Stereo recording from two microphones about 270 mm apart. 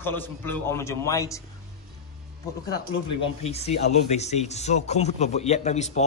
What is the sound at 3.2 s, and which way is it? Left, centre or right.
Speech, left.